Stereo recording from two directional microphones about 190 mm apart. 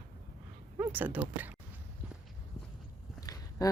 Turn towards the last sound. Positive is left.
turn(degrees=20)  # may be behind; listen again after turning